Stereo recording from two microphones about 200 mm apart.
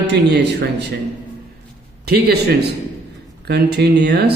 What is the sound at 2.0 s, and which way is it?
A man's voice, 55° right (ahead or behind).